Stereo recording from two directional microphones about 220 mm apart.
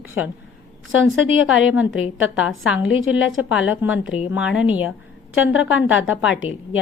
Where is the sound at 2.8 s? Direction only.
60° left (ahead or behind).